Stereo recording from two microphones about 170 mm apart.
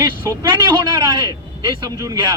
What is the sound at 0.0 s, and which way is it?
A man's voice, 25° right (ahead or behind).